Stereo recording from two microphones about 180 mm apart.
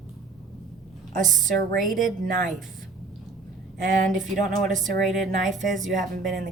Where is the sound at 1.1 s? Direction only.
45° right (ahead or behind).